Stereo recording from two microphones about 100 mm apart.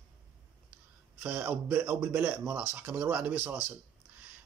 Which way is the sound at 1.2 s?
15° right (ahead or behind).